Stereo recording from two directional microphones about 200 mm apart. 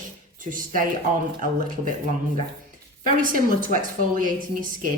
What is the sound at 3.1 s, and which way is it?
Speech, 45° right (ahead or behind).